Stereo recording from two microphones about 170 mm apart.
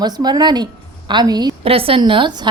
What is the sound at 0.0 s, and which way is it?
A woman's voice, 25° right (ahead or behind).